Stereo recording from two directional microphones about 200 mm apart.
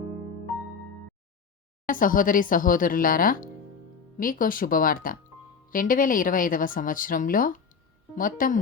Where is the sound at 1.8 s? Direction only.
45° left (ahead or behind).